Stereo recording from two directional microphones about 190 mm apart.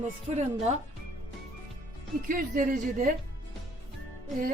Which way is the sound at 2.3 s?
45° right (ahead or behind).